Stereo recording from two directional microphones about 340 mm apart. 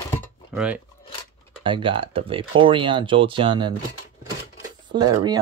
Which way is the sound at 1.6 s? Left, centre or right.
Centre.